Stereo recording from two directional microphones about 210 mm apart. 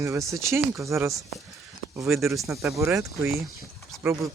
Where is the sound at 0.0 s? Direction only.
15° right (ahead or behind).